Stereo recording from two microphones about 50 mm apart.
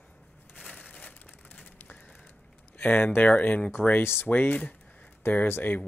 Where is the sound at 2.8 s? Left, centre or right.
Left.